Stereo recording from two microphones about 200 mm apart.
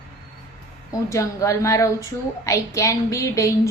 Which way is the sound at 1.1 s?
15° left (ahead or behind).